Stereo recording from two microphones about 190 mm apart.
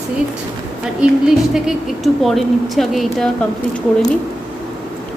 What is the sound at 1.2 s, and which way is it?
A woman's voice, 5° right (ahead or behind).